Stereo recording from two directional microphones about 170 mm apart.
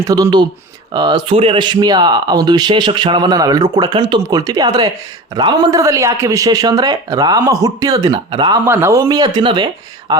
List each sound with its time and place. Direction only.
0.0 s speech: 20° right (ahead or behind)
8.6 s speech: 15° right (ahead or behind)